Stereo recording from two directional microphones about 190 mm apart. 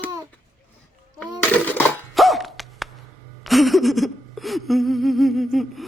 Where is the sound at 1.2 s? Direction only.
10° left (ahead or behind).